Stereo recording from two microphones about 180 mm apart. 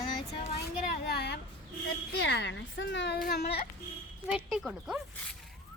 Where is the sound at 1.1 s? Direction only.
65° left (ahead or behind).